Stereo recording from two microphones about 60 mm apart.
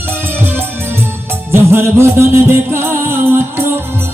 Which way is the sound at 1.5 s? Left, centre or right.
Right.